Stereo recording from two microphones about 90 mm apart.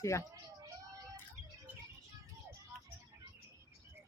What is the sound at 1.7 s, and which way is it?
Music, 15° right (ahead or behind).